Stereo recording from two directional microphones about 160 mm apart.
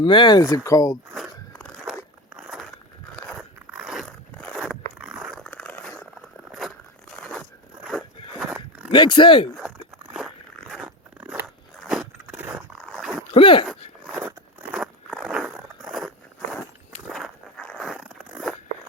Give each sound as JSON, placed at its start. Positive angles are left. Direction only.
{"t": 0.0, "sound": "speech", "side_deg": 30}
{"t": 2.3, "sound": "biting", "side_deg": -5}
{"t": 4.5, "sound": "zipper", "side_deg": -5}
{"t": 5.4, "sound": "a sound", "side_deg": 5}
{"t": 6.5, "sound": "a sound", "side_deg": 0}
{"t": 8.4, "sound": "a sound", "side_deg": -10}
{"t": 8.9, "sound": "speech", "side_deg": 30}
{"t": 9.6, "sound": "crunch", "side_deg": -5}
{"t": 12.8, "sound": "dog", "side_deg": -5}
{"t": 13.3, "sound": "speech", "side_deg": 35}
{"t": 14.2, "sound": "zipper", "side_deg": -10}
{"t": 15.1, "sound": "biting", "side_deg": -5}
{"t": 15.9, "sound": "a sound", "side_deg": 0}
{"t": 17.1, "sound": "zipper", "side_deg": 0}